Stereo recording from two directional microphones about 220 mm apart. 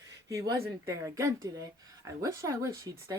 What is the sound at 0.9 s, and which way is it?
A woman's voice, 15° right (ahead or behind).